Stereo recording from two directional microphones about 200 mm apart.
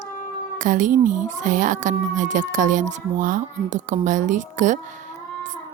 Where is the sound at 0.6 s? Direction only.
40° right (ahead or behind).